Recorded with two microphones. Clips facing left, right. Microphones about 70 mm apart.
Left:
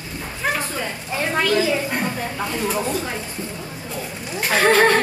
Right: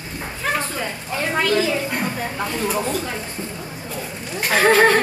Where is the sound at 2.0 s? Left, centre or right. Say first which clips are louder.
Even; centre.